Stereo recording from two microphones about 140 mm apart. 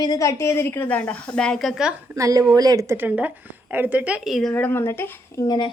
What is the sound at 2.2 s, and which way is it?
A woman's voice, 25° right (ahead or behind).